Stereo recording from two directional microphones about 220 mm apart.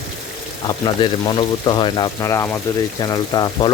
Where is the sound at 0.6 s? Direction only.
20° left (ahead or behind).